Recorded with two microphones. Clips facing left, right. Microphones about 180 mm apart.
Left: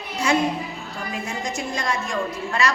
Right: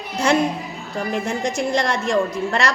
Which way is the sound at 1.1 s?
75° right (ahead or behind).